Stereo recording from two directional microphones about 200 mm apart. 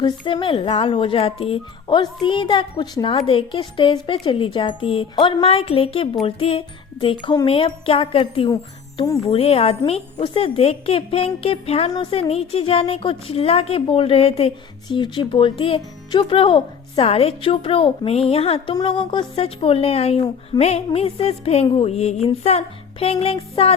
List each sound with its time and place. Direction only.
0.0 s a woman's voice: 25° left (ahead or behind)
9.3 s a woman's voice: 30° left (ahead or behind)